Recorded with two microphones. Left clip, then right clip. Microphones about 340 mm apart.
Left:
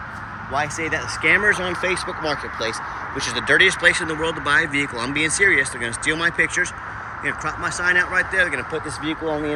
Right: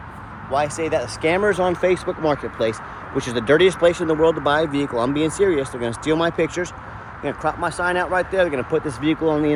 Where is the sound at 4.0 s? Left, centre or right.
Right.